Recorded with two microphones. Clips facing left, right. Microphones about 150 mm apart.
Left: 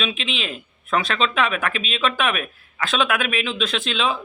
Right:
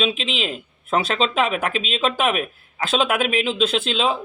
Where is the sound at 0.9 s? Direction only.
25° right (ahead or behind).